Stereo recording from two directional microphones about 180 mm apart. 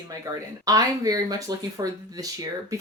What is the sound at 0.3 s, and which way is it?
Speech, 20° right (ahead or behind).